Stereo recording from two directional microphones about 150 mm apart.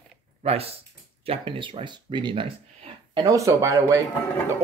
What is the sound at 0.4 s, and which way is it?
Speech, 40° right (ahead or behind).